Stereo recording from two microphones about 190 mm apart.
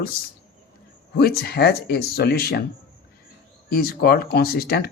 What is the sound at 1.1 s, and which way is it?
Speech, 55° left (ahead or behind).